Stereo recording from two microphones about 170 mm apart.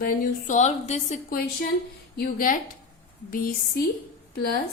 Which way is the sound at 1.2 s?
55° left (ahead or behind).